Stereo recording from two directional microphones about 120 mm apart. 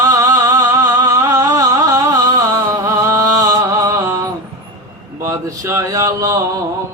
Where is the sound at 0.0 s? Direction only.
30° right (ahead or behind).